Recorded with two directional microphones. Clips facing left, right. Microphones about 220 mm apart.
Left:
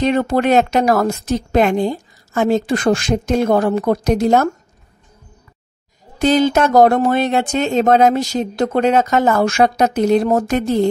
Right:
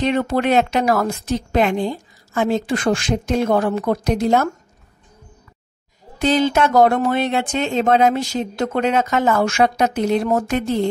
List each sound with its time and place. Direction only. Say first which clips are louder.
0.0 s a woman's voice: left 3 dB; 40° left (ahead or behind)
6.1 s speech: left 3 dB; 45° left (ahead or behind)